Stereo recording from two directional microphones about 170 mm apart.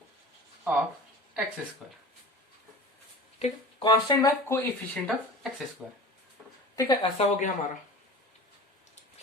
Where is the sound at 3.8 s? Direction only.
25° left (ahead or behind).